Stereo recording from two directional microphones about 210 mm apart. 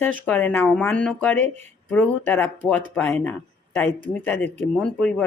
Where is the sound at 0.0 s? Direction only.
5° left (ahead or behind).